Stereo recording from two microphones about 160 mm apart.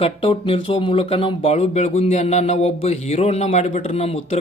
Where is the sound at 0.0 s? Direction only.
35° left (ahead or behind).